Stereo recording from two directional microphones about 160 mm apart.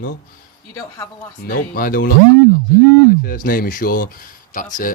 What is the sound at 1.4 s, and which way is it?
Speech, 65° left (ahead or behind).